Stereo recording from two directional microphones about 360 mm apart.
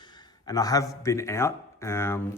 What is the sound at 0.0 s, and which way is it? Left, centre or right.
A man's voice, centre.